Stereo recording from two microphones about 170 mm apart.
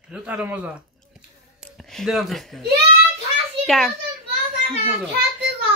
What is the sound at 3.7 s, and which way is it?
Speech, centre (ahead or behind).